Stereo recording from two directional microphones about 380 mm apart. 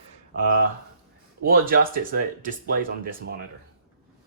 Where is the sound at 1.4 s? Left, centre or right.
Right.